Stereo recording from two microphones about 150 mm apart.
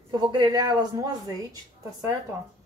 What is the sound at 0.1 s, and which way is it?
A woman's voice, 30° right (ahead or behind).